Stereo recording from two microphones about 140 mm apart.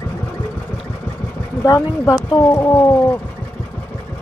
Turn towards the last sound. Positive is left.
turn(degrees=20)  # may be behind; listen again after turning